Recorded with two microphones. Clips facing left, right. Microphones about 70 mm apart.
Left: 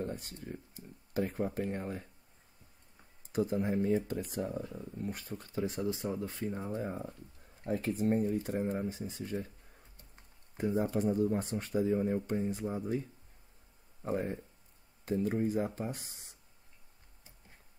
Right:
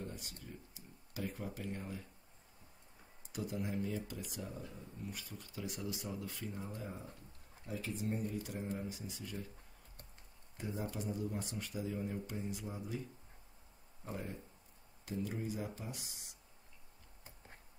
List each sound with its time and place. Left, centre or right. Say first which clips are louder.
0.0 s a sound: left 8 dB; left
3.3 s speech: left 9 dB; left
10.6 s speech: left 11 dB; left
14.0 s speech: left 10 dB; left